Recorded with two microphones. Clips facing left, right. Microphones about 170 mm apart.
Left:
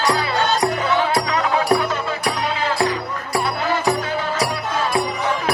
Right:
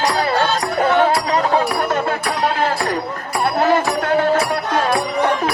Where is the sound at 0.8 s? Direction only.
50° right (ahead or behind).